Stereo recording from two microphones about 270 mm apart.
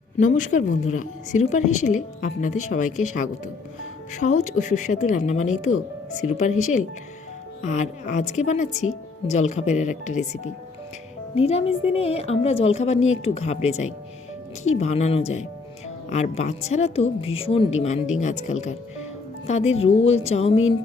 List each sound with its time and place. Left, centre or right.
0.2 s a woman's voice: left